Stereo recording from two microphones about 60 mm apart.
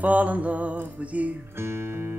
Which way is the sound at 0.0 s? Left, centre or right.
Right.